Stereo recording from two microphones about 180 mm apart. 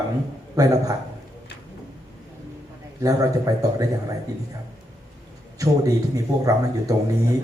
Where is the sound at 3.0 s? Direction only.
20° right (ahead or behind).